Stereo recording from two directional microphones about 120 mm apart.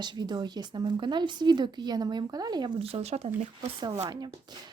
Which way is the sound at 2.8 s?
55° right (ahead or behind).